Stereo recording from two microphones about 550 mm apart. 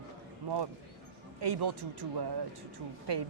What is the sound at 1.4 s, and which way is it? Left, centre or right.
A woman's voice, right.